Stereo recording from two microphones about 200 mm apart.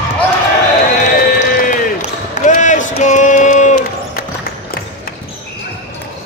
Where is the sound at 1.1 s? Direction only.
45° left (ahead or behind).